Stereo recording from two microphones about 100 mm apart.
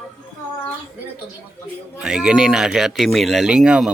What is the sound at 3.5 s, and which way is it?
Speech, 10° right (ahead or behind).